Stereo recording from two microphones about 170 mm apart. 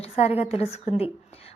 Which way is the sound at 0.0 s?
35° left (ahead or behind).